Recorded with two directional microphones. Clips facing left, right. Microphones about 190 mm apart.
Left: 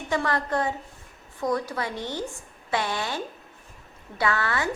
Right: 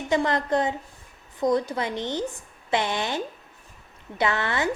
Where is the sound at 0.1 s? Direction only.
20° right (ahead or behind).